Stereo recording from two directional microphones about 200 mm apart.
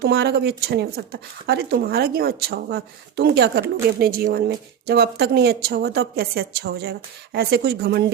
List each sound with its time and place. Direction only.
0.0 s speech: 55° right (ahead or behind)